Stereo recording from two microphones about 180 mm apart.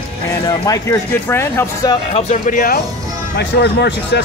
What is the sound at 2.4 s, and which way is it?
Speech, 50° left (ahead or behind).